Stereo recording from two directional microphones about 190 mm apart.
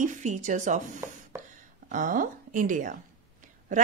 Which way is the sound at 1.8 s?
45° right (ahead or behind).